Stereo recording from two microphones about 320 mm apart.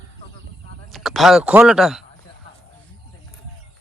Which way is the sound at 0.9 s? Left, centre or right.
Centre.